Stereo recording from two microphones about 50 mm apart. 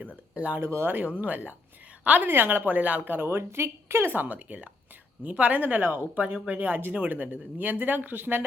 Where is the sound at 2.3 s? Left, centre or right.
Right.